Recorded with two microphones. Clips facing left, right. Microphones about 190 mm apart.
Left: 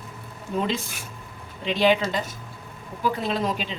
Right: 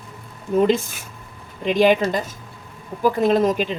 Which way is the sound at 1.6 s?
50° right (ahead or behind).